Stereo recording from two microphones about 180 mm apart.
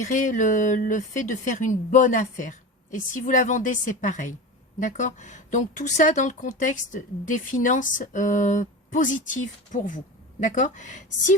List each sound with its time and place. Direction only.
0.0 s speech: 45° left (ahead or behind)